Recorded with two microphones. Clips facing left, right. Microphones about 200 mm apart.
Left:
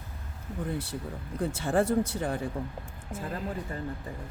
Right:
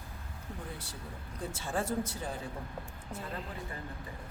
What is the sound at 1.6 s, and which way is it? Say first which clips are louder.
Speech: left 8 dB; 65° left (ahead or behind).